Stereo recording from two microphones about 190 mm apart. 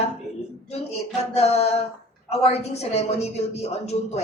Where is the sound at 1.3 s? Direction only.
35° left (ahead or behind).